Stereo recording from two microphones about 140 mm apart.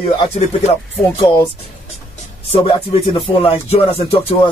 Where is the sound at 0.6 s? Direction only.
45° left (ahead or behind).